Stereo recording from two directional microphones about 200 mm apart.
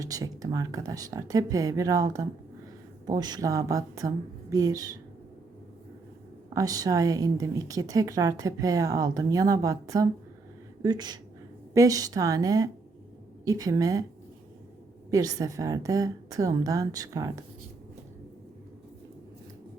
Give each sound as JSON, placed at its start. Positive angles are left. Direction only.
{"t": 0.0, "sound": "a woman's voice", "side_deg": -15}
{"t": 6.5, "sound": "a woman's voice", "side_deg": -15}
{"t": 15.1, "sound": "a woman's voice", "side_deg": -20}